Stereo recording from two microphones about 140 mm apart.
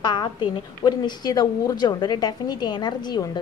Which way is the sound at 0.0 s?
30° left (ahead or behind).